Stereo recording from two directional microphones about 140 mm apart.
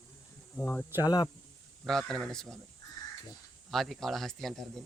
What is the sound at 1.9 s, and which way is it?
Speech, 5° left (ahead or behind).